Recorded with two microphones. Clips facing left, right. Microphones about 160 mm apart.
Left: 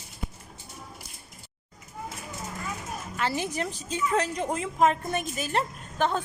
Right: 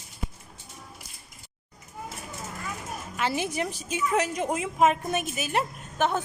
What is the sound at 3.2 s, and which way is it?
A woman's voice, 15° right (ahead or behind).